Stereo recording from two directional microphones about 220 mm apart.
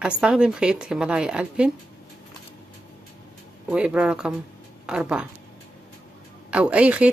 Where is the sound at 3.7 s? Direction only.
5° right (ahead or behind).